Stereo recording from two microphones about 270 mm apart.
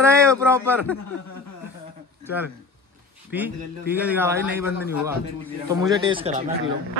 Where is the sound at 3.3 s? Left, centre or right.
Centre.